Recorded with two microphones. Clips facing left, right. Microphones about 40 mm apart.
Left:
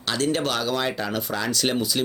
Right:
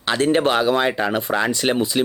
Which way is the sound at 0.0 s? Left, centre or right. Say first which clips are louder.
Right 6 dB; right.